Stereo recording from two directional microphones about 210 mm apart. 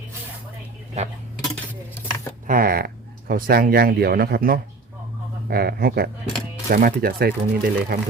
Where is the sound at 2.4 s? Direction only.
45° right (ahead or behind).